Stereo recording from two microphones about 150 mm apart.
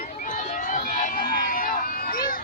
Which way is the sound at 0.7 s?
60° left (ahead or behind).